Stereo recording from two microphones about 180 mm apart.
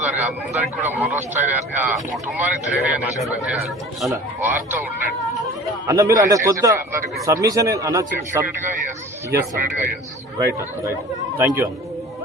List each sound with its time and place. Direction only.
0.0 s speech: 10° right (ahead or behind)